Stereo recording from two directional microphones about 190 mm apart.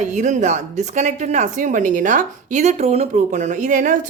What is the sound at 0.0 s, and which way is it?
Speech, 40° right (ahead or behind).